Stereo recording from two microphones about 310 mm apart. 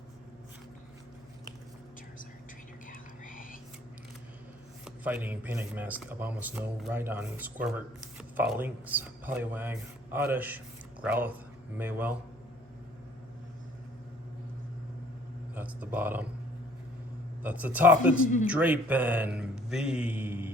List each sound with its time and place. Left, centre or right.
2.8 s whispering: left
4.9 s speech: centre
15.5 s speech: centre
17.4 s speech: centre